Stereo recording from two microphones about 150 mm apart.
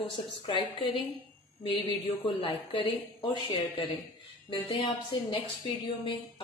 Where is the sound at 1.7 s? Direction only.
35° left (ahead or behind).